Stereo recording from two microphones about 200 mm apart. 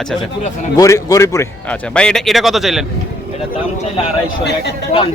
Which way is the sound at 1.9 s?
5° left (ahead or behind).